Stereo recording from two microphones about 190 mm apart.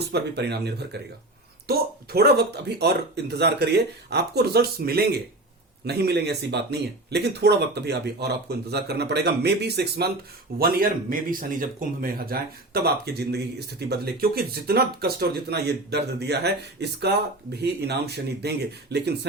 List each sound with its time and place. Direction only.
0.0 s speech: 60° right (ahead or behind)